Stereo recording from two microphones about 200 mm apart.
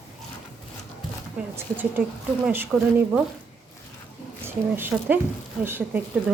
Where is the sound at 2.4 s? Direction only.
10° right (ahead or behind).